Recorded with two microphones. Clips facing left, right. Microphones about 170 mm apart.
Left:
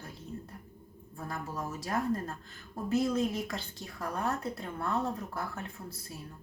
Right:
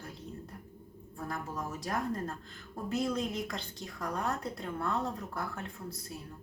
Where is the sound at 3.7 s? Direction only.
15° right (ahead or behind).